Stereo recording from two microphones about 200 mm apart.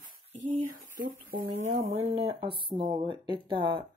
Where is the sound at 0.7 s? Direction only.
45° right (ahead or behind).